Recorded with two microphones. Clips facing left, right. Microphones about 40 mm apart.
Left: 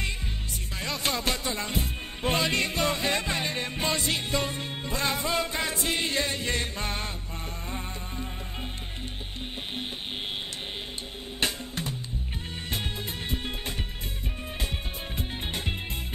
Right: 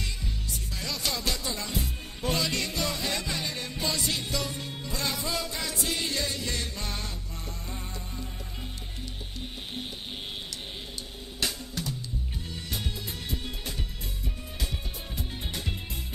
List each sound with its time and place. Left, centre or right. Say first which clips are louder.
0.7 s music: left 3 dB; left
11.3 s music: left 3 dB; left
15.1 s music: left 3 dB; left